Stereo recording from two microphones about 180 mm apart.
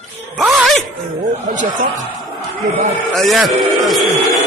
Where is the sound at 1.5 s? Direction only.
45° right (ahead or behind).